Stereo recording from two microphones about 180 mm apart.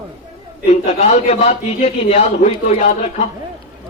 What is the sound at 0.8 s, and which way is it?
A man's voice, 35° left (ahead or behind).